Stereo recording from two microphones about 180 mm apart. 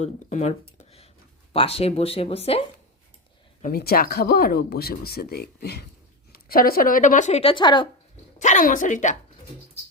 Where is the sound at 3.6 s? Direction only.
55° left (ahead or behind); by 7.9 s 25° left (ahead or behind).